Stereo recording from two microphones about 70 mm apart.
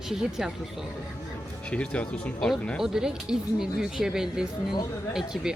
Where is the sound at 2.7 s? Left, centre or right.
Centre.